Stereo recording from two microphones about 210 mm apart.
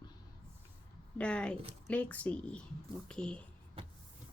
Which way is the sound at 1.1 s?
5° left (ahead or behind).